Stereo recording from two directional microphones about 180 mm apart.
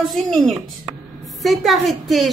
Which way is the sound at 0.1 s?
Centre (ahead or behind).